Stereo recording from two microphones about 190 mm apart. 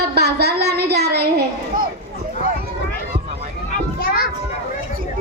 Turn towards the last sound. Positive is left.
turn(degrees=50)  # may be behind; listen again after turning